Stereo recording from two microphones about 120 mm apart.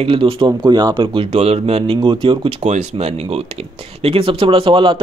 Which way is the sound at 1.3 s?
60° right (ahead or behind).